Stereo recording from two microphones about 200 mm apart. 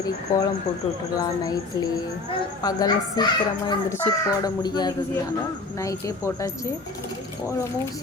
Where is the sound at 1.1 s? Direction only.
20° left (ahead or behind).